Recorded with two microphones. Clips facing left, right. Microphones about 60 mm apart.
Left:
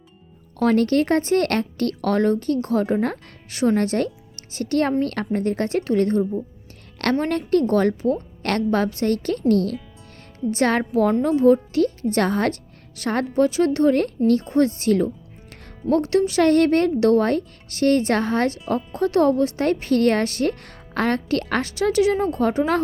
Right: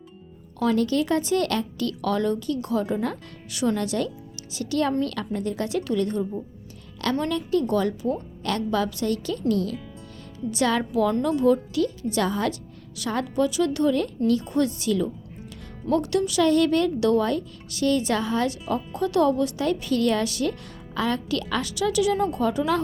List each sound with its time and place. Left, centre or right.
0.6 s a woman's voice: left
13.2 s a woman's voice: left
16.4 s speech: left